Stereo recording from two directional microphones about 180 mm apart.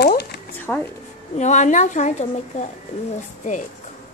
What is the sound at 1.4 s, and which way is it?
Speech, 40° left (ahead or behind).